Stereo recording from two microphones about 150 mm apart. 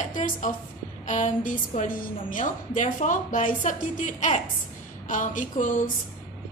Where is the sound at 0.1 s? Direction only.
60° left (ahead or behind).